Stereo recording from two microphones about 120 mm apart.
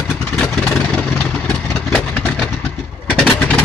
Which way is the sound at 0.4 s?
10° left (ahead or behind).